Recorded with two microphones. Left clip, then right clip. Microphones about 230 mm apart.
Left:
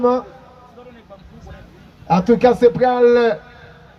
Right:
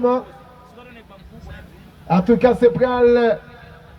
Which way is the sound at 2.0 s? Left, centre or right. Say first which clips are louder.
Left 2 dB; centre.